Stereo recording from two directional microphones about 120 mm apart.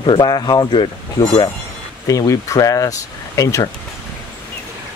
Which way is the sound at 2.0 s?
25° left (ahead or behind).